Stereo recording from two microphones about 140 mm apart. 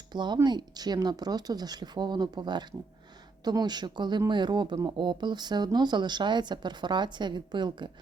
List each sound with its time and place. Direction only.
0.1 s speech: 30° right (ahead or behind)